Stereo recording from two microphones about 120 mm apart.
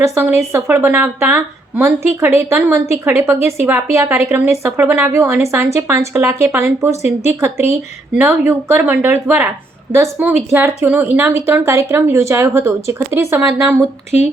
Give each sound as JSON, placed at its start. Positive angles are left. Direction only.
{"t": 0.0, "sound": "a woman's voice", "side_deg": -20}